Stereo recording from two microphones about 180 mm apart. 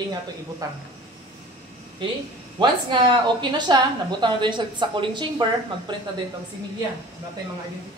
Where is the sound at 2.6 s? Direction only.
25° right (ahead or behind).